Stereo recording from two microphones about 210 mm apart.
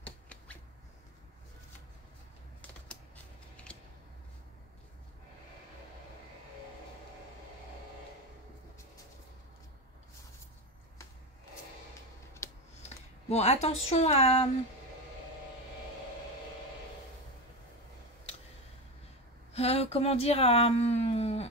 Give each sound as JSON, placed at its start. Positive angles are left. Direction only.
{"t": 0.0, "sound": "finger snapping", "side_deg": 5}
{"t": 3.7, "sound": "a sound", "side_deg": 5}
{"t": 12.4, "sound": "computer keyboard", "side_deg": 15}
{"t": 13.3, "sound": "a woman's voice", "side_deg": 30}
{"t": 19.5, "sound": "speech", "side_deg": 30}